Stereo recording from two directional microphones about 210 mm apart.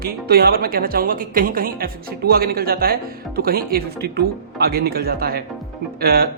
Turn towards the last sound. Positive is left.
turn(degrees=-45)  # may be behind; listen again after turning